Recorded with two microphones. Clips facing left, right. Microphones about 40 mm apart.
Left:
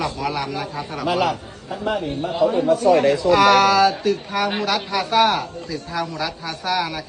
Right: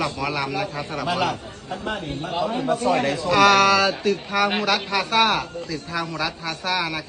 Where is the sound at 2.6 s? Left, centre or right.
Right.